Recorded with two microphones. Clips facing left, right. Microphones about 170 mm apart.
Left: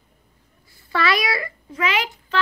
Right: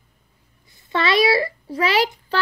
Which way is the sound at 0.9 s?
25° right (ahead or behind).